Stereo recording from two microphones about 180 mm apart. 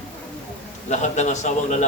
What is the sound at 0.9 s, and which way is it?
Speech, 40° left (ahead or behind).